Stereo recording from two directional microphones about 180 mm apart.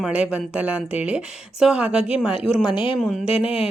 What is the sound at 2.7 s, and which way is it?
Speech, 30° left (ahead or behind).